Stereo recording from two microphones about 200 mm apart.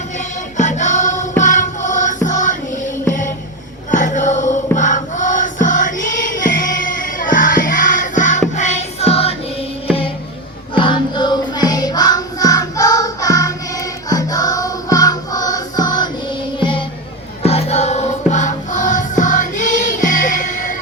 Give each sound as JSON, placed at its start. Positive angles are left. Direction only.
{"t": 0.5, "sound": "choir", "side_deg": 35}
{"t": 1.4, "sound": "music", "side_deg": 40}